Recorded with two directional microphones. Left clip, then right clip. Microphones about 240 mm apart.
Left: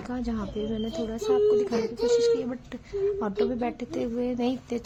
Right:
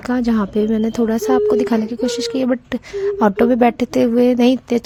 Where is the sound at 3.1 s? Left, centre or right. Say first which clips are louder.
Right 14 dB; right.